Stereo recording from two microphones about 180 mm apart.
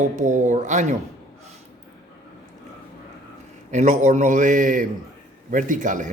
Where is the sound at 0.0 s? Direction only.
45° right (ahead or behind).